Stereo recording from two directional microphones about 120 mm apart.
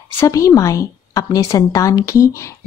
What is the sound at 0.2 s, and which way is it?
A woman's voice, 25° left (ahead or behind).